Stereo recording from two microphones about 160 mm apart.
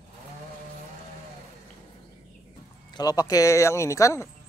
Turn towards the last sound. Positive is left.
turn(degrees=20)  # may be behind; listen again after turning